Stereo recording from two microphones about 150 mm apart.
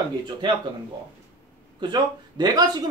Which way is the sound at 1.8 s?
30° right (ahead or behind).